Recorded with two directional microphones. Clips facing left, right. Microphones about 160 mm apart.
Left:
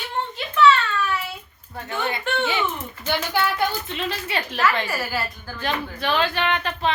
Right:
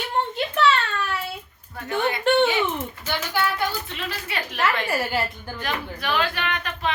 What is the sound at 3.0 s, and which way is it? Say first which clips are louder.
A woman's voice: left 3 dB; 25° left (ahead or behind).